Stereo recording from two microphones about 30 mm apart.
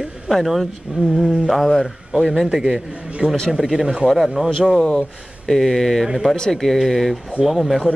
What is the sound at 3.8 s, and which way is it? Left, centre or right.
Speech, right.